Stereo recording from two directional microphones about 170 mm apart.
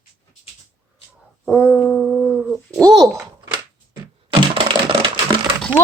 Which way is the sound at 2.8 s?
20° right (ahead or behind).